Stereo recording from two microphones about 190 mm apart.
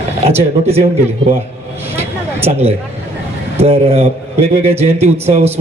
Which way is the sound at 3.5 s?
30° right (ahead or behind).